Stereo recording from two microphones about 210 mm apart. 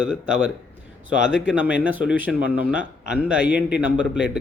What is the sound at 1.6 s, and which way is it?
Speech, 5° right (ahead or behind).